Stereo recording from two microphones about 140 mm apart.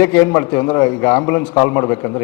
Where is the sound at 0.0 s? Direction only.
15° left (ahead or behind).